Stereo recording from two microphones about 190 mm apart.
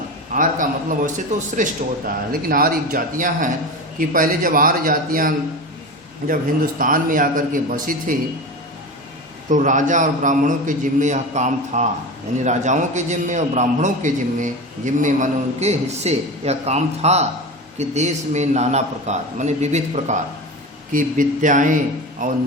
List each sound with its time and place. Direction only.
0.3 s a man's voice: 45° right (ahead or behind)
9.5 s a man's voice: 40° right (ahead or behind)